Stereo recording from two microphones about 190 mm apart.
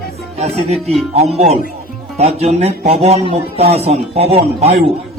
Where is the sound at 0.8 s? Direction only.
30° right (ahead or behind).